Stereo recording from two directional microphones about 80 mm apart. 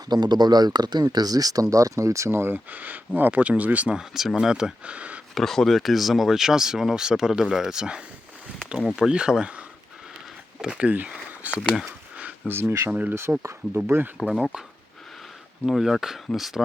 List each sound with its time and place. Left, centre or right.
0.1 s speech: right; by 5.2 s centre
5.3 s speech: centre
12.1 s a sound: right
12.9 s speech: right
13.8 s speech: right
14.2 s speech: centre
15.6 s speech: centre